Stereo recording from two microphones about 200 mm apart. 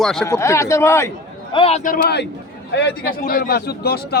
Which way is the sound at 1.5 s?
30° left (ahead or behind).